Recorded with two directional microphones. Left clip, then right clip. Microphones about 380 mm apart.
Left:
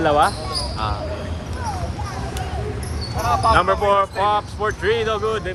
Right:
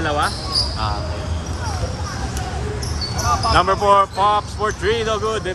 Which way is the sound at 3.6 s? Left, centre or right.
Centre.